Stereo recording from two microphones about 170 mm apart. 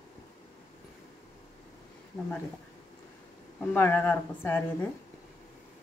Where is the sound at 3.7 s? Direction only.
10° left (ahead or behind).